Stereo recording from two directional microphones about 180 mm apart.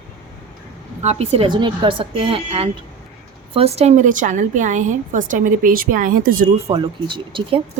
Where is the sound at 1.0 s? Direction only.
35° right (ahead or behind).